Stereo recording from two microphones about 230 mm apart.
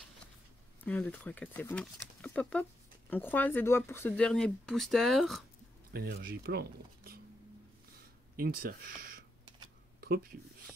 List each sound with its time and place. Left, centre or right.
0.8 s speech: centre
5.9 s speech: right
8.6 s speech: right
9.9 s a sound: right